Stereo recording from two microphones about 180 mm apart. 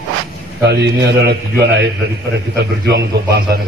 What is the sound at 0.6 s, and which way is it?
A man's voice, 70° right (ahead or behind).